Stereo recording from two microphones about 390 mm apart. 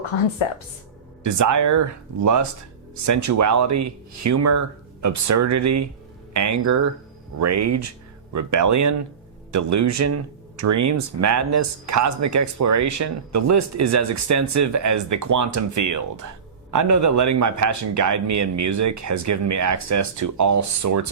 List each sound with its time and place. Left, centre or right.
1.2 s speech: right